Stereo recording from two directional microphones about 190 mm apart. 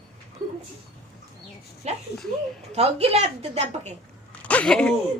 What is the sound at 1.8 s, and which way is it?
A woman's voice, 35° right (ahead or behind).